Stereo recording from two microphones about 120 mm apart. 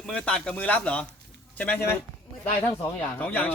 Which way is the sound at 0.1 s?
5° left (ahead or behind).